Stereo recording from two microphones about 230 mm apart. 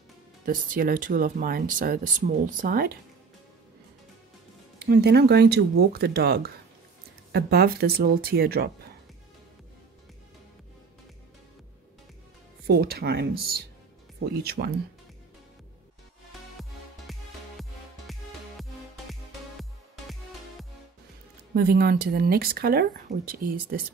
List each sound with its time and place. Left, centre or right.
0.5 s speech: right
4.8 s speech: right
12.6 s speech: right
16.3 s music: centre
21.5 s speech: right